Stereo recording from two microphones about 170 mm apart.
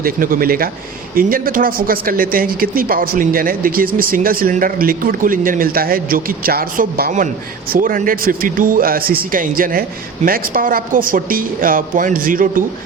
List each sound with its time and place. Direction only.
0.0 s speech: 55° right (ahead or behind)